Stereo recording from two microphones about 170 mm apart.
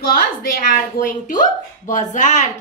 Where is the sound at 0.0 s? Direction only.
60° left (ahead or behind).